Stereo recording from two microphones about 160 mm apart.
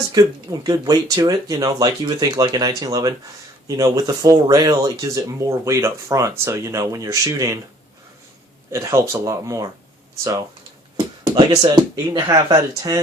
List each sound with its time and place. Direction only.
0.1 s speech: 25° right (ahead or behind)
8.7 s speech: 20° right (ahead or behind)
11.2 s speech: 30° right (ahead or behind)